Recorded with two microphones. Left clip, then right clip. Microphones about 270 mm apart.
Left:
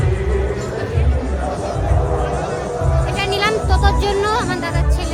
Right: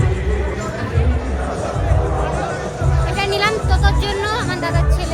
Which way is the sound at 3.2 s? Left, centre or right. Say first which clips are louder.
Right 1 dB; centre.